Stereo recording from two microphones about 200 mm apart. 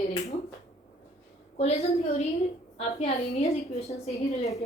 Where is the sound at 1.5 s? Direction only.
30° left (ahead or behind).